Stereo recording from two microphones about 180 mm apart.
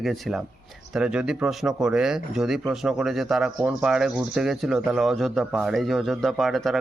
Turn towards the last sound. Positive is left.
turn(degrees=0)  # may be behind; listen again after turning